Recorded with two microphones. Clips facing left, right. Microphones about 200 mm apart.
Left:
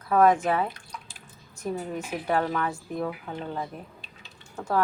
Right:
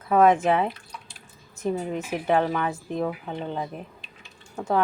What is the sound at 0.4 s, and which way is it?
A woman's voice, 25° right (ahead or behind).